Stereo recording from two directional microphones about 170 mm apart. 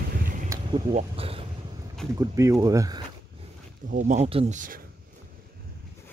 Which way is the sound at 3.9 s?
50° right (ahead or behind).